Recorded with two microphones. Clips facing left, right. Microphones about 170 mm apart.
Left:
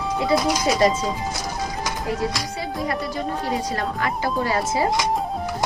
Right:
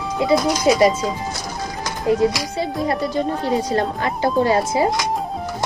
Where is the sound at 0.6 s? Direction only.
10° right (ahead or behind).